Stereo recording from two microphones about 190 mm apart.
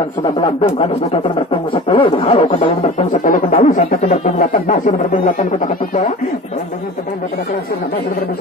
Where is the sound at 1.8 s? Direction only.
30° left (ahead or behind).